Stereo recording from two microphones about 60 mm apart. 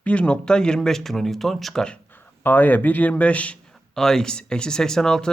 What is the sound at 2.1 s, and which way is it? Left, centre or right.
A man's voice, left.